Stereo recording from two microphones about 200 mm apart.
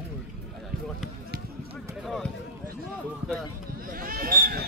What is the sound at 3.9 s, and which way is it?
Basketball bounce, 45° right (ahead or behind).